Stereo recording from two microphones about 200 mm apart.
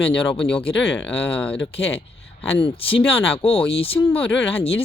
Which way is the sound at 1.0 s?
5° left (ahead or behind).